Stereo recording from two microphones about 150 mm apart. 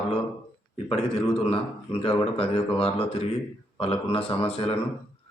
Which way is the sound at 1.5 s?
40° left (ahead or behind).